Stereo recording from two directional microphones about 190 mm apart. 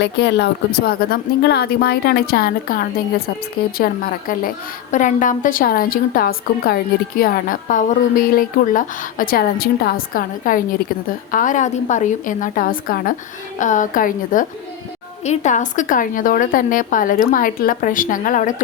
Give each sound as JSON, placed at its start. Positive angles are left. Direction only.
{"t": 0.0, "sound": "speech", "side_deg": 65}